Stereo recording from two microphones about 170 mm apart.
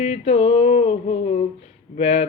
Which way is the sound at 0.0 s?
40° left (ahead or behind).